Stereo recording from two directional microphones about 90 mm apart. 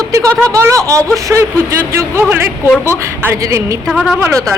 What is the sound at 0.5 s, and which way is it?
Speech, 35° right (ahead or behind).